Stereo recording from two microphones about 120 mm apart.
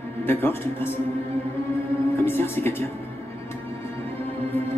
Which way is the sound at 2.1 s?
20° left (ahead or behind).